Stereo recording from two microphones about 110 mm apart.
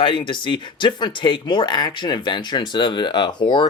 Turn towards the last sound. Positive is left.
turn(degrees=40)  # may be behind; listen again after turning